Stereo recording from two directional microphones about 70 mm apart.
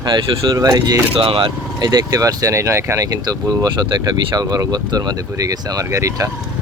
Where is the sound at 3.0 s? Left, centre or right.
Right.